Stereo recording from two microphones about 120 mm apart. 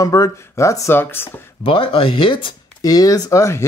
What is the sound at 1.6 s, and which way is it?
Speech, 45° left (ahead or behind).